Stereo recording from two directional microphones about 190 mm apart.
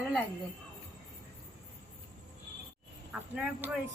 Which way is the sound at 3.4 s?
5° right (ahead or behind).